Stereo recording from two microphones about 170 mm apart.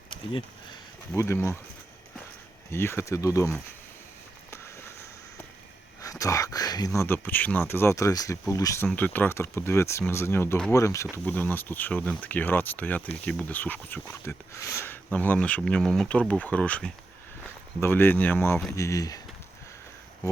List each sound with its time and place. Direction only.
1.1 s speech: 15° left (ahead or behind)
2.6 s speech: 15° left (ahead or behind)
6.0 s speech: 20° left (ahead or behind)